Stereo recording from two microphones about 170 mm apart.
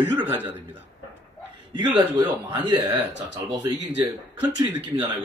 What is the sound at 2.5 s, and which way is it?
Speech, 25° right (ahead or behind).